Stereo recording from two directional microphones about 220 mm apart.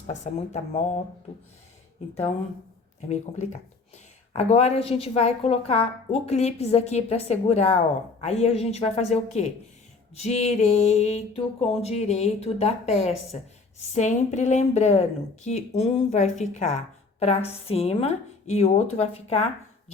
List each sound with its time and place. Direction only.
0.1 s a woman's voice: 30° left (ahead or behind)
4.4 s a woman's voice: 30° left (ahead or behind)